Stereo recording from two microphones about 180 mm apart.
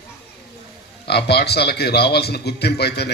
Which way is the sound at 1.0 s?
65° left (ahead or behind).